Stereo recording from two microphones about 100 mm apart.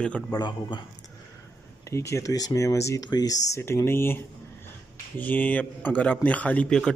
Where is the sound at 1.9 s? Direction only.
30° left (ahead or behind).